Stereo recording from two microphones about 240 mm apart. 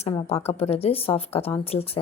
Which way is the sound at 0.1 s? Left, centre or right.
Left.